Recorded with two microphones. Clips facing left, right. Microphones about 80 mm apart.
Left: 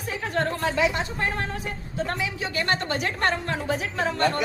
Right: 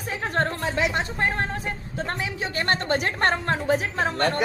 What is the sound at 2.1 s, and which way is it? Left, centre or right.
A woman's voice, right.